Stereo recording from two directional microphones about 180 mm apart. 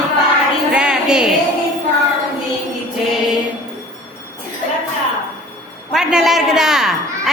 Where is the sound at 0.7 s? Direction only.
5° right (ahead or behind).